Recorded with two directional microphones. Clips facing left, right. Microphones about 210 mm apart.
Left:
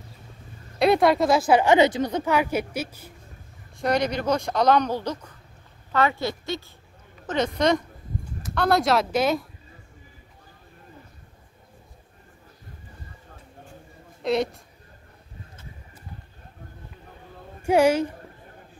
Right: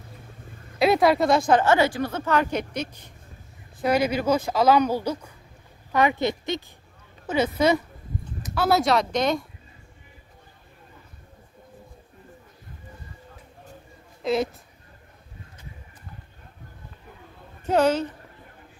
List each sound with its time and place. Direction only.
0.7 s speech: centre (ahead or behind)
3.8 s a woman's voice: 5° right (ahead or behind)
7.2 s a woman's voice: 5° right (ahead or behind)
14.2 s speech: centre (ahead or behind)
17.6 s speech: 10° left (ahead or behind)